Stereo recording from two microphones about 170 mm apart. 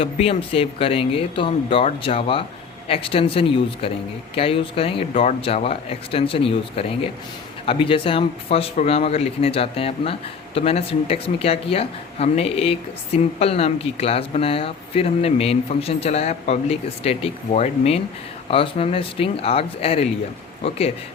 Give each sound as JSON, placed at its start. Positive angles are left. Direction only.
{"t": 0.0, "sound": "speech", "side_deg": 35}